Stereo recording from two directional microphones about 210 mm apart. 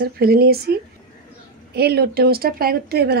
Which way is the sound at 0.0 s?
45° right (ahead or behind).